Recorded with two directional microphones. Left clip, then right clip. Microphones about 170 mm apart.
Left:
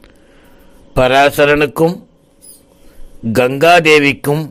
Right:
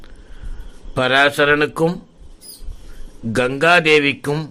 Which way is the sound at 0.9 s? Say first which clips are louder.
Left 5 dB; 30° left (ahead or behind).